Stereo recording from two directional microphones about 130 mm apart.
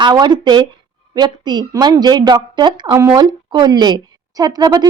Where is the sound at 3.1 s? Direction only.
35° right (ahead or behind).